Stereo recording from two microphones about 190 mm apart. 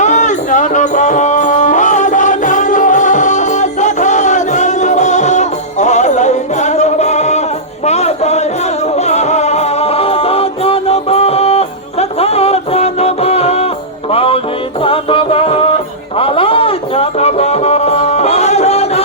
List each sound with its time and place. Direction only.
0.0 s music: 40° left (ahead or behind)